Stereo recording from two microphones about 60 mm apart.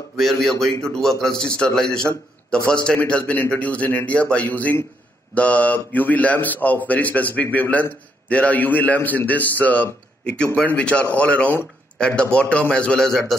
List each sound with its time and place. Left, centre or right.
0.2 s a man's voice: centre